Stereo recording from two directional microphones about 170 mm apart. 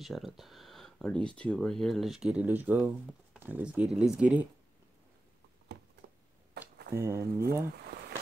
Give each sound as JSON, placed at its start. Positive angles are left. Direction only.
{"t": 0.0, "sound": "speech", "side_deg": 0}
{"t": 6.6, "sound": "a sound", "side_deg": -70}
{"t": 7.0, "sound": "speech", "side_deg": -15}